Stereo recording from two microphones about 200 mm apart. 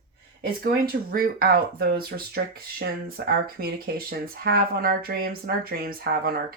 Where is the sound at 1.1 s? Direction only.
50° right (ahead or behind).